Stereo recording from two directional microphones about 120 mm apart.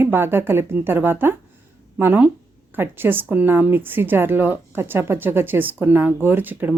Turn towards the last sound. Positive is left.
turn(degrees=-15)  # may be behind; listen again after turning